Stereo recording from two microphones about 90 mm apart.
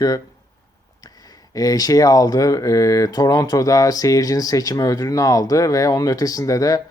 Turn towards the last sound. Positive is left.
turn(degrees=40)  # may be behind; listen again after turning